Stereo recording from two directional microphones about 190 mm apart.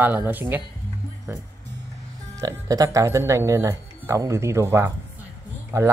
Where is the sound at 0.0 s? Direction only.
10° right (ahead or behind).